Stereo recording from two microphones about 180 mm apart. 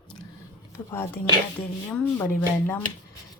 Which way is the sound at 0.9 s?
15° left (ahead or behind).